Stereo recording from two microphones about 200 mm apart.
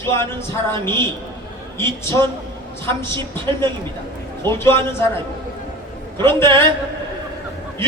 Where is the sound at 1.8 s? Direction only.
15° left (ahead or behind).